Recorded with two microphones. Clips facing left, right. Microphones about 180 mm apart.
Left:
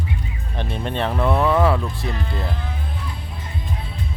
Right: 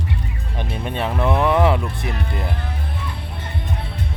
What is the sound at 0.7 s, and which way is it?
Speech, 10° right (ahead or behind).